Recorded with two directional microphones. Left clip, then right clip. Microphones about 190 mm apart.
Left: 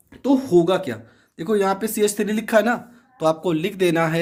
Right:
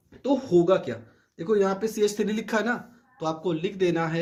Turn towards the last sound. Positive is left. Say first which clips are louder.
# left 6 dB
turn(degrees=35)  # may be behind; listen again after turning